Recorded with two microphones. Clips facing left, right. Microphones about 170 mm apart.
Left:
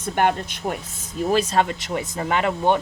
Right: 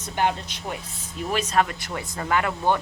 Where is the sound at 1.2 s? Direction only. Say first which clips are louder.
Left 7 dB; 40° left (ahead or behind).